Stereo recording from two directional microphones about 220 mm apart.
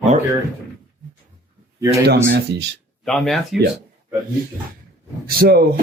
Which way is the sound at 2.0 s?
50° right (ahead or behind).